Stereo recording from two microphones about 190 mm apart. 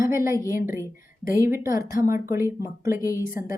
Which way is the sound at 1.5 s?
15° right (ahead or behind).